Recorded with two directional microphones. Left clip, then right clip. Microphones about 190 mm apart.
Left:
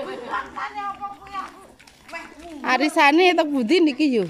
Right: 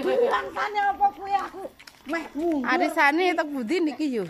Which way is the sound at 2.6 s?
15° left (ahead or behind).